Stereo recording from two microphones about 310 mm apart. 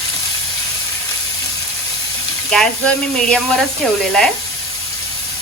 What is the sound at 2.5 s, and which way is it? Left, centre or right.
Speech, centre.